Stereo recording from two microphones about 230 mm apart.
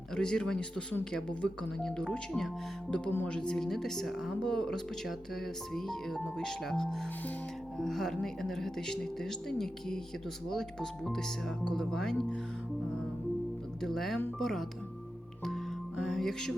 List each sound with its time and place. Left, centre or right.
0.2 s speech: centre
13.8 s speech: centre
16.0 s music: centre